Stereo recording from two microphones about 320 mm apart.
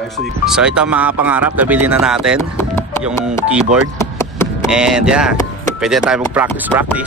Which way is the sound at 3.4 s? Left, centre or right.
Centre.